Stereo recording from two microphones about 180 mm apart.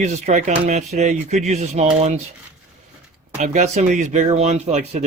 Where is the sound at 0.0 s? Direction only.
40° right (ahead or behind).